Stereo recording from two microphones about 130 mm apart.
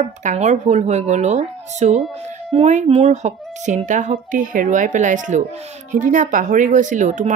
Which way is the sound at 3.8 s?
75° right (ahead or behind).